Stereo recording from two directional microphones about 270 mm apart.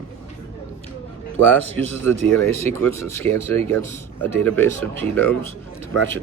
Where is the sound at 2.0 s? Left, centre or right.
Centre.